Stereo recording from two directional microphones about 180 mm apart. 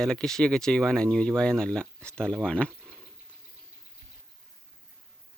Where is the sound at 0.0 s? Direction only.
5° left (ahead or behind).